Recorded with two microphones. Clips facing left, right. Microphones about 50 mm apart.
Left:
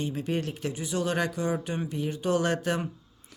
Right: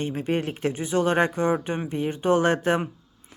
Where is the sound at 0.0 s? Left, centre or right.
Right.